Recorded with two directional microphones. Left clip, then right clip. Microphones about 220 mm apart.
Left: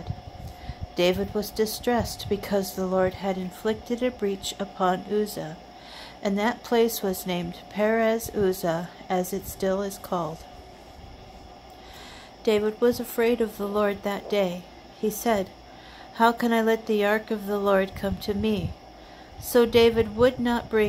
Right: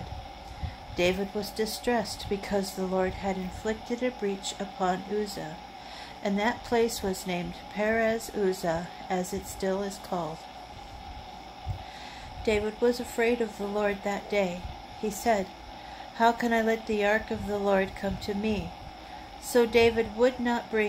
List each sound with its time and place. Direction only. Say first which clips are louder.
0.9 s speech: left 4 dB; 35° left (ahead or behind)
12.4 s speech: left 4 dB; 35° left (ahead or behind)